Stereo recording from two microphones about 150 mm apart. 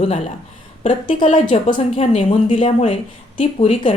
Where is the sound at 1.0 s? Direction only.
60° left (ahead or behind).